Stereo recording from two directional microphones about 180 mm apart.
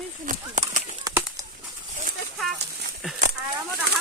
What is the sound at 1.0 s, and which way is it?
Bird, 20° right (ahead or behind).